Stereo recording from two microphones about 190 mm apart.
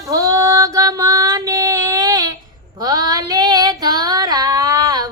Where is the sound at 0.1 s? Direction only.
15° right (ahead or behind).